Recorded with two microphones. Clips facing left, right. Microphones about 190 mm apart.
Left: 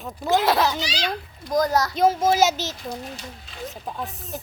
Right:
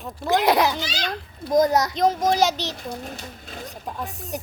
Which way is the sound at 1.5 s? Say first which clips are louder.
Right 3 dB; 20° right (ahead or behind).